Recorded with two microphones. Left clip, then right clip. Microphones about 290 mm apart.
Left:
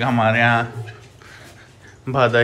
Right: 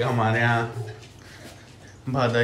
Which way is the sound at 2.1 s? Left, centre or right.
Centre.